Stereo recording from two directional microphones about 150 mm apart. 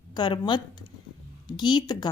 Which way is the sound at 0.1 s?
30° left (ahead or behind).